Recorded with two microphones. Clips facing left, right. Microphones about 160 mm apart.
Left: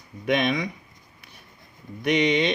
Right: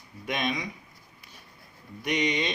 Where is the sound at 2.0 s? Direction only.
70° left (ahead or behind).